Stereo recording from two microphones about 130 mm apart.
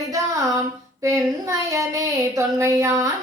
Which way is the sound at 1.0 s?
25° right (ahead or behind).